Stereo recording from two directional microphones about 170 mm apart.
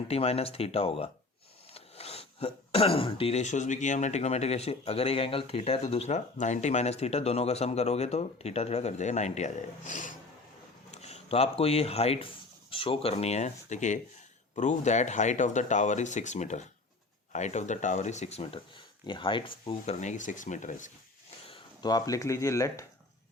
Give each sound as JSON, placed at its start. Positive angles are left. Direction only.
{"t": 0.1, "sound": "speech", "side_deg": 35}
{"t": 21.4, "sound": "speech", "side_deg": 30}